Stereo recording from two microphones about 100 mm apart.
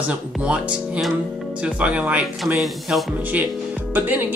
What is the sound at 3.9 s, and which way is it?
Speech, 20° right (ahead or behind).